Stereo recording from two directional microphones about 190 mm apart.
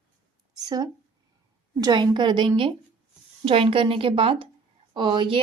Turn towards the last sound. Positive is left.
turn(degrees=-25)  # may be behind; listen again after turning